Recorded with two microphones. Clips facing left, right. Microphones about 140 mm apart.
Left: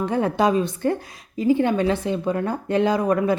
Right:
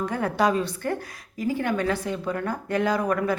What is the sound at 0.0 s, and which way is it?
Speech, 20° left (ahead or behind).